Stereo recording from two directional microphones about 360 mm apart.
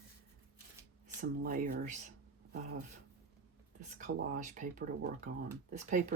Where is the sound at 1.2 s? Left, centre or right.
Right.